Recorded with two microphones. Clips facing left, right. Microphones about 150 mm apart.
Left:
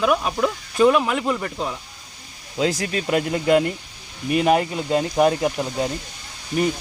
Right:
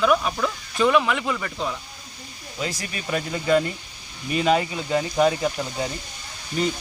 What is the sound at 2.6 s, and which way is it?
Speech, 85° left.